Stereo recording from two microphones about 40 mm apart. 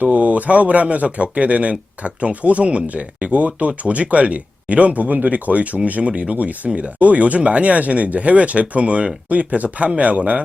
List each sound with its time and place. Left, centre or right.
0.0 s speech: right